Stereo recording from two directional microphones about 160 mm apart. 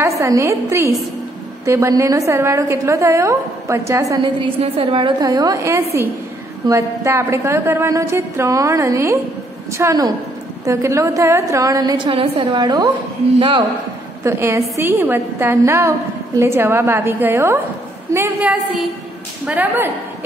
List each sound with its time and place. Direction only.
0.0 s a woman's voice: 20° right (ahead or behind)
4.4 s a woman's voice: 35° right (ahead or behind)
14.2 s a woman's voice: 15° right (ahead or behind)